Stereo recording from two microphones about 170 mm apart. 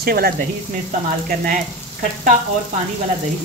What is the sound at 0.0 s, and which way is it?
Speech, 65° right (ahead or behind).